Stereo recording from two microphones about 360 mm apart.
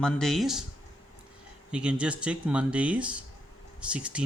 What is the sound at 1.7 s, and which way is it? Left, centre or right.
Speech, centre.